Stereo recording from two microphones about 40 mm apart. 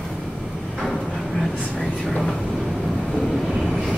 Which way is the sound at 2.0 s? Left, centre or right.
Centre.